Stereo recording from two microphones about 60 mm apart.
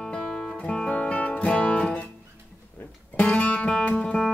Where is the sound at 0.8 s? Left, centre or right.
Left.